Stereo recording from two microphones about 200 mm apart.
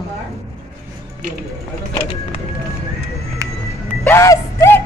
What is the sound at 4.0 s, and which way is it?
Music, 15° left (ahead or behind).